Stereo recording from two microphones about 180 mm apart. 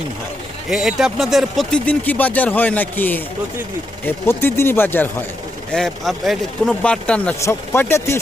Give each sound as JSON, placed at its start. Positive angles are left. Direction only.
{"t": 0.7, "sound": "speech", "side_deg": 0}